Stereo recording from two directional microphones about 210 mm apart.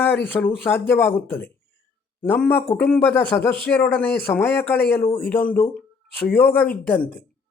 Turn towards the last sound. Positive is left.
turn(degrees=10)  # may be behind; listen again after turning